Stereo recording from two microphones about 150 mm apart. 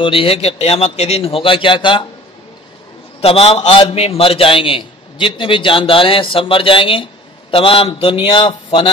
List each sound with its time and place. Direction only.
0.0 s a man's voice: 35° left (ahead or behind)
3.2 s a man's voice: 40° left (ahead or behind)